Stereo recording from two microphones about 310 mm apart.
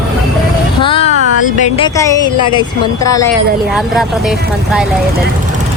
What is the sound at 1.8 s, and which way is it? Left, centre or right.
Speech, centre.